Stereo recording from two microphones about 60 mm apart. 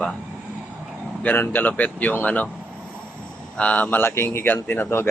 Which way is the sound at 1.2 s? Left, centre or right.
Left.